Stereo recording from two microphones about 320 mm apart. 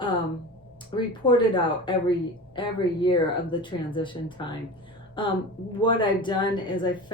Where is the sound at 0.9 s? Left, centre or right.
Centre.